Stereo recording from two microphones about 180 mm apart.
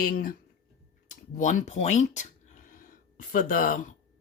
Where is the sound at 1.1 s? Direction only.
45° left (ahead or behind).